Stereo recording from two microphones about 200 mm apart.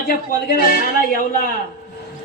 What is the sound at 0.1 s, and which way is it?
A man's voice, 45° left (ahead or behind).